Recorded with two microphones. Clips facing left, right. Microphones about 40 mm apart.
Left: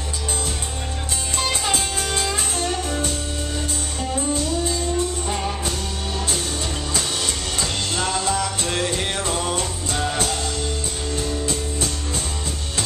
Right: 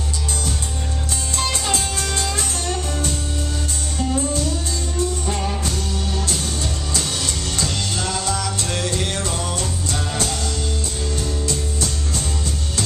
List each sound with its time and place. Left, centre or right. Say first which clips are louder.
1.3 s music: even; centre
4.2 s music: left 1 dB; centre
7.6 s music: left 1 dB; centre